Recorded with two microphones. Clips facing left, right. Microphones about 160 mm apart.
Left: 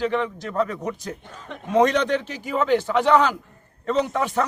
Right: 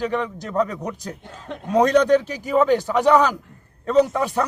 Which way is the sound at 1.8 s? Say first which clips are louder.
Right 5 dB; 40° right (ahead or behind).